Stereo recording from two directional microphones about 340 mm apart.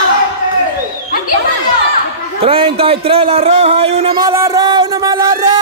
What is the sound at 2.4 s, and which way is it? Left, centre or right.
Speech, centre.